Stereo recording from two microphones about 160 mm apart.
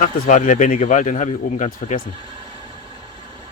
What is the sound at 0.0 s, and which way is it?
Speech, 50° left (ahead or behind).